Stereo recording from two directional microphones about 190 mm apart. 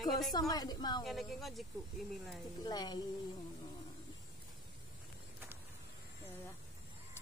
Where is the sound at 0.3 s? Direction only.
20° left (ahead or behind).